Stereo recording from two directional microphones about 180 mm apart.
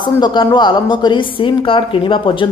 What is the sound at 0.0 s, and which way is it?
Speech, 25° left (ahead or behind).